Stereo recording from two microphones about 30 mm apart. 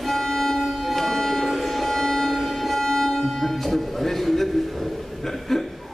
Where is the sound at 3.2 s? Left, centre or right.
Centre.